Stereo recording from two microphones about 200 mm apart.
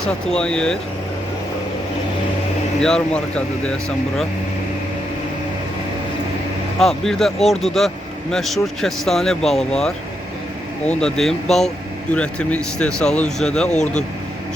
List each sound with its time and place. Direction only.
0.0 s speech: 5° left (ahead or behind)
2.8 s speech: 5° left (ahead or behind)
6.7 s speech: centre (ahead or behind)
13.7 s speech: 35° left (ahead or behind)